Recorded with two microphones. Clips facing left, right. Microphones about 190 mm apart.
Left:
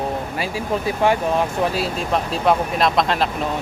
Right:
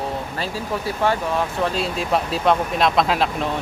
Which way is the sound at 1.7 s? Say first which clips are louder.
Even; centre (ahead or behind).